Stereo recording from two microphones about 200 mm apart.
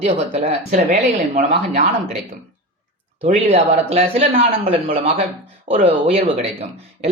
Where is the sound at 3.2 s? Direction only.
30° right (ahead or behind).